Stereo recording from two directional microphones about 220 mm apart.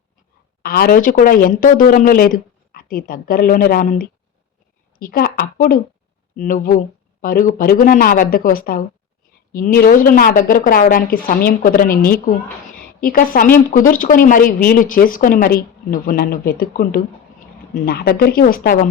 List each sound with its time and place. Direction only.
0.6 s speech: 45° left (ahead or behind)